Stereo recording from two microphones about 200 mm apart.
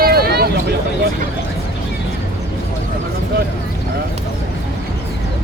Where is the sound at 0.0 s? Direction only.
50° right (ahead or behind).